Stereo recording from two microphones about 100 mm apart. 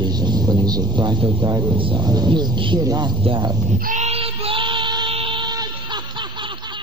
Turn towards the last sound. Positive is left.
turn(degrees=-55)  # may be behind; listen again after turning